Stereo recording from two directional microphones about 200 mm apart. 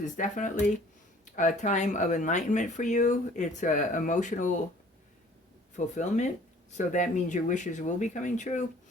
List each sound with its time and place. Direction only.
0.0 s speech: 40° left (ahead or behind)
5.7 s speech: 35° left (ahead or behind)